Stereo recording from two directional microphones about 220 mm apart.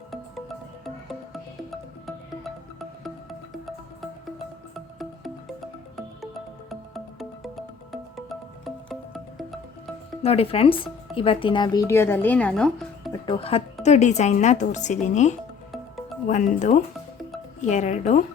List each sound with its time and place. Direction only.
0.1 s music: centre (ahead or behind)
6.7 s music: centre (ahead or behind)
10.2 s a woman's voice: 25° left (ahead or behind); by 12.9 s 5° left (ahead or behind)
13.2 s speech: 25° left (ahead or behind)
15.7 s music: centre (ahead or behind)
16.2 s speech: 35° left (ahead or behind)